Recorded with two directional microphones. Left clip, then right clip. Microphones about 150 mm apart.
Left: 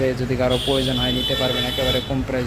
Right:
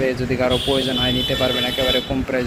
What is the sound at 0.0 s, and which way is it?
Speech, 5° left (ahead or behind).